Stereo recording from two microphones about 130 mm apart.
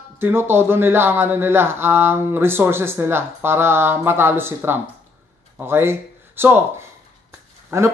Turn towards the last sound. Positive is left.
turn(degrees=-20)  # may be behind; listen again after turning